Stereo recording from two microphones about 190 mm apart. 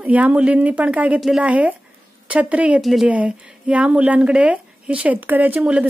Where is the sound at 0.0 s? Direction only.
5° right (ahead or behind).